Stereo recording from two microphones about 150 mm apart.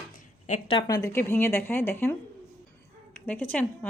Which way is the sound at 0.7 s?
25° left (ahead or behind).